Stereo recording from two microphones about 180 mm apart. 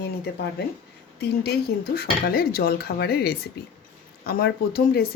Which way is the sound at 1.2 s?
65° left (ahead or behind).